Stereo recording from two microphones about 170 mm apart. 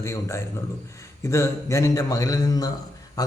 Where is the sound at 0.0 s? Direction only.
15° left (ahead or behind).